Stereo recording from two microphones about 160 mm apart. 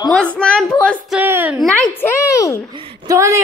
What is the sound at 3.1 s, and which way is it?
Speech, 20° right (ahead or behind).